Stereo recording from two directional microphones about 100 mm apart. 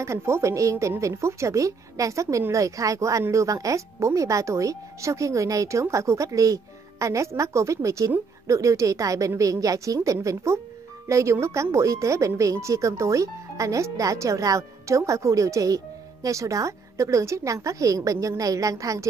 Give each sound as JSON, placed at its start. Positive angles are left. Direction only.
{"t": 0.0, "sound": "speech", "side_deg": -30}